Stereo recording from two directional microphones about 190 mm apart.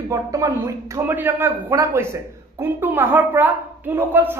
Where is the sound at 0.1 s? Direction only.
20° right (ahead or behind).